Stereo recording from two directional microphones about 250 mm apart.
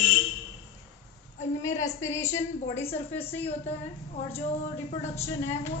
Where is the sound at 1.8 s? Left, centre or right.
Centre.